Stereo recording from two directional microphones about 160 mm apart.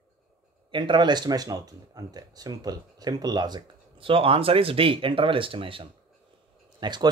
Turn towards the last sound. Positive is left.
turn(degrees=-30)  # may be behind; listen again after turning